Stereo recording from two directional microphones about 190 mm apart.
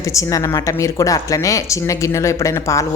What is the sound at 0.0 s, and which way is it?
A woman's voice, 15° left (ahead or behind).